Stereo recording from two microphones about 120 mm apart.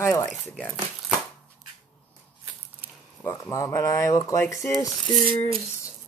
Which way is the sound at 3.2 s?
25° left (ahead or behind).